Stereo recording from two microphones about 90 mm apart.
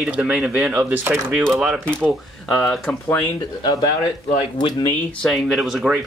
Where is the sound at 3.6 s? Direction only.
50° left (ahead or behind).